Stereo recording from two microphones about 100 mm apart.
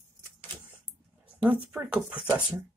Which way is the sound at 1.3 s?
10° right (ahead or behind).